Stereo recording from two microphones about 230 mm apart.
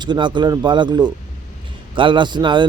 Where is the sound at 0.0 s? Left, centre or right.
Centre.